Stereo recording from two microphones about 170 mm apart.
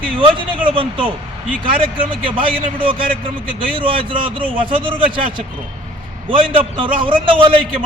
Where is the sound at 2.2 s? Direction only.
30° right (ahead or behind).